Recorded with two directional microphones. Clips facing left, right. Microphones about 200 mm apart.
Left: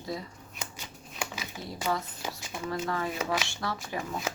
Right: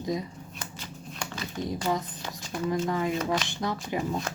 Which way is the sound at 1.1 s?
5° left (ahead or behind).